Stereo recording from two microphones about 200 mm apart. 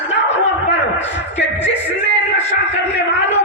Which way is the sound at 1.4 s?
60° left (ahead or behind).